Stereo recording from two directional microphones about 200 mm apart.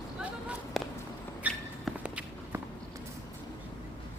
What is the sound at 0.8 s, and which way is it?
Walk, centre (ahead or behind).